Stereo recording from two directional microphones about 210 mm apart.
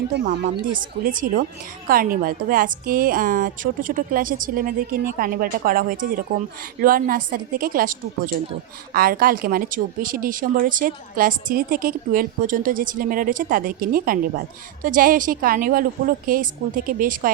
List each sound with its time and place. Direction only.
0.8 s a woman's voice: 40° right (ahead or behind)